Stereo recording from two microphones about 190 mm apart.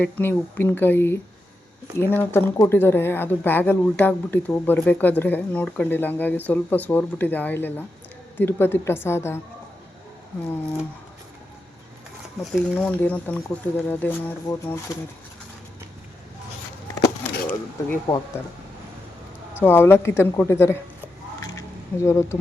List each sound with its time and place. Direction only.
0.0 s a woman's voice: 10° left (ahead or behind)
12.4 s a woman's voice: centre (ahead or behind)
17.5 s a woman's voice: 15° left (ahead or behind)
19.5 s a woman's voice: 10° left (ahead or behind)
21.4 s a sound: 15° left (ahead or behind)